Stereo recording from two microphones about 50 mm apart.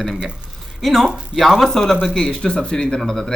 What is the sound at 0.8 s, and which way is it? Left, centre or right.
Speech, centre.